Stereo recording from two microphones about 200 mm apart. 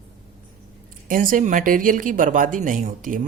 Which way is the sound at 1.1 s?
40° right (ahead or behind).